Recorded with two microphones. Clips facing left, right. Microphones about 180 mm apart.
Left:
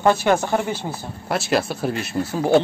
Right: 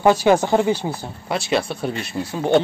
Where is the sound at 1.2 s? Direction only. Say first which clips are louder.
Even; centre (ahead or behind).